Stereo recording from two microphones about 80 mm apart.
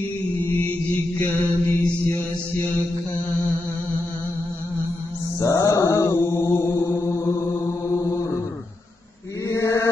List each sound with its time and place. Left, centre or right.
1.3 s mantra: left
5.4 s chant: left
9.5 s mantra: left